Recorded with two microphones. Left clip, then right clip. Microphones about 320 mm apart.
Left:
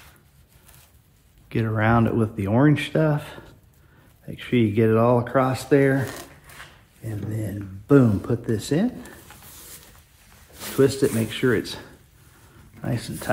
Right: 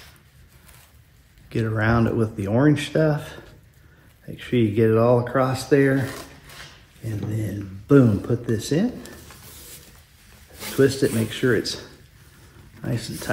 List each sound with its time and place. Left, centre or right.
1.5 s speech: left
7.3 s speech: centre
10.8 s speech: centre
12.8 s speech: centre